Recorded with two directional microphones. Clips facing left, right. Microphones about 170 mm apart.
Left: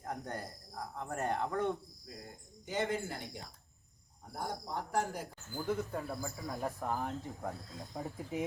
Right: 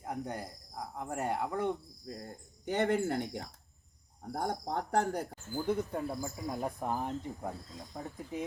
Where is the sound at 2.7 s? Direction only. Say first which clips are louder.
Right 6 dB; 60° right (ahead or behind).